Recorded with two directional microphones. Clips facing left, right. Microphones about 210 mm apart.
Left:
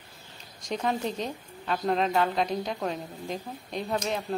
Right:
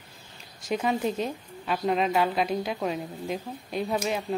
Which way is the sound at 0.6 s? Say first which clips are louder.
Right 2 dB; 5° right (ahead or behind).